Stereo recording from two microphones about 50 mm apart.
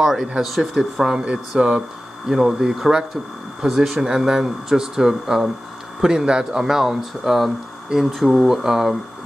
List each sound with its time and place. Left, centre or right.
0.0 s speech: centre